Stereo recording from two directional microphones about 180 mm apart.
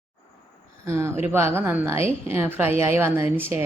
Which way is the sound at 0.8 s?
15° right (ahead or behind).